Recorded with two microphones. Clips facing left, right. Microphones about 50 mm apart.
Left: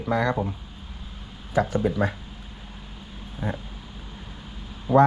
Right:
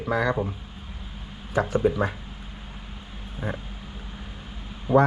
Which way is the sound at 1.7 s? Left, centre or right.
Right.